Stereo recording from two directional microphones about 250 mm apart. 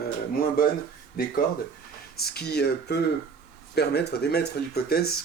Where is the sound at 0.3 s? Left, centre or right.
Left.